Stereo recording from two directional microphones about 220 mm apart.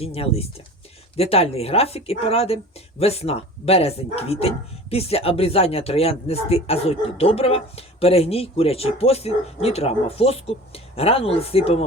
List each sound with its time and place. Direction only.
0.0 s speech: 25° left (ahead or behind)